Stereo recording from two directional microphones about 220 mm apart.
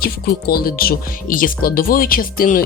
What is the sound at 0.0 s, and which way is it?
Speech, 45° left (ahead or behind).